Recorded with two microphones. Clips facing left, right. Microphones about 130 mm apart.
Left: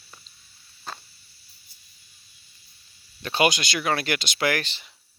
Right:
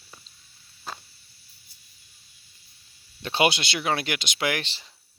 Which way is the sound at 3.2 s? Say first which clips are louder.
Left 1 dB; 25° right (ahead or behind).